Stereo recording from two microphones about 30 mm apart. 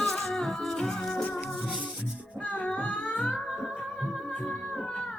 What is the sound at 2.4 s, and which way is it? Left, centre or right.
Child singing, left.